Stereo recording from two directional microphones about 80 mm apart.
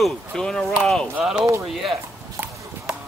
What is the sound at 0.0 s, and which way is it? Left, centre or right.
Speech, centre.